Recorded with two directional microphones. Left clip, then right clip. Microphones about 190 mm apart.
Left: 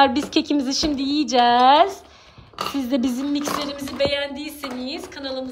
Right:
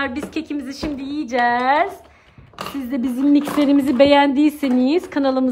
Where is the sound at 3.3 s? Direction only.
15° right (ahead or behind).